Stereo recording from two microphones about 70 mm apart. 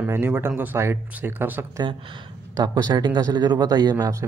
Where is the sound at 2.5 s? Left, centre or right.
Right.